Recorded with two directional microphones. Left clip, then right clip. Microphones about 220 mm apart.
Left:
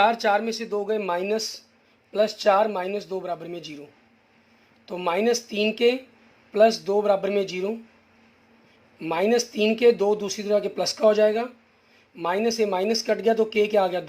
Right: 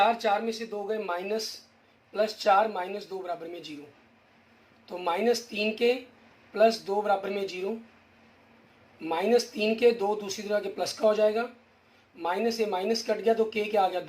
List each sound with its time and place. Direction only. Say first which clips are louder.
0.0 s speech: left 4 dB; 50° left (ahead or behind)
4.9 s speech: left 4 dB; 50° left (ahead or behind)
9.0 s speech: left 3 dB; 50° left (ahead or behind)